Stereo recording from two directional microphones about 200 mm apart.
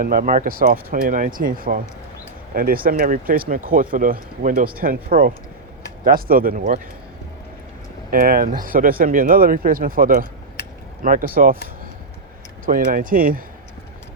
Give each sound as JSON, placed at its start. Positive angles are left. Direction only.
{"t": 0.0, "sound": "speech", "side_deg": -45}
{"t": 8.1, "sound": "speech", "side_deg": -45}
{"t": 12.6, "sound": "speech", "side_deg": -45}